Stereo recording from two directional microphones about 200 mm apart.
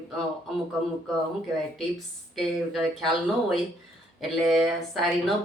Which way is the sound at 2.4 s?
Centre (ahead or behind).